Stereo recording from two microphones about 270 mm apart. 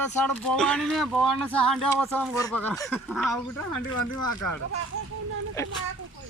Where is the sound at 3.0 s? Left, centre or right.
Centre.